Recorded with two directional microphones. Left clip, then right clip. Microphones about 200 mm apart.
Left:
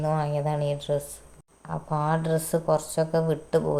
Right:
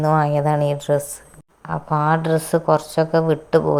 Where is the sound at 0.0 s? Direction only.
30° right (ahead or behind).